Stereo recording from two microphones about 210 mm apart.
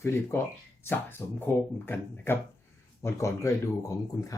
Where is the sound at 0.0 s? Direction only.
10° left (ahead or behind).